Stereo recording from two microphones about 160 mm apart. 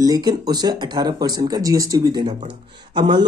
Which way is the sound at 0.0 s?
25° right (ahead or behind).